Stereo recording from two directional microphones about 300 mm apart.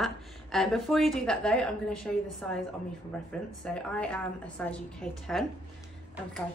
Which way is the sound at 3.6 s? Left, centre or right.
Centre.